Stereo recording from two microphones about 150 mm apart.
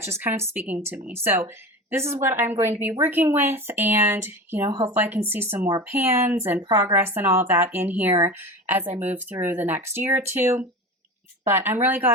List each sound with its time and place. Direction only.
0.0 s speech: 15° right (ahead or behind)